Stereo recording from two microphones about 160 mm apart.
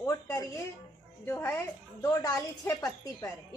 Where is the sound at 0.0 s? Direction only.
20° left (ahead or behind).